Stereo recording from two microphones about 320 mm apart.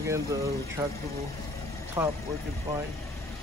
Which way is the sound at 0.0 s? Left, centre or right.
Centre.